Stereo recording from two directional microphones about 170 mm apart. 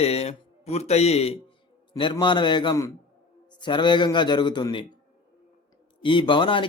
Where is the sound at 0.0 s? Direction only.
35° left (ahead or behind).